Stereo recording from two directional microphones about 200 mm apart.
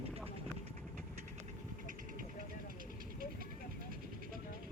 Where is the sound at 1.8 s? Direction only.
40° right (ahead or behind).